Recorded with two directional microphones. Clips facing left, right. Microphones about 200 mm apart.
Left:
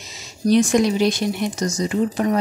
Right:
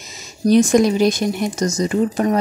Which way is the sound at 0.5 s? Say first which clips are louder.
Right 3 dB; 45° right (ahead or behind).